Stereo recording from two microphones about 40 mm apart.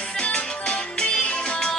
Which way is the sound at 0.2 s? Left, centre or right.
Left.